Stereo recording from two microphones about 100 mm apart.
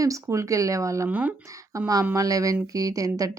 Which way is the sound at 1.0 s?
15° right (ahead or behind).